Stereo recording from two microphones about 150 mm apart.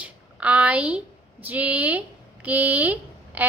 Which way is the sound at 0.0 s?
10° right (ahead or behind).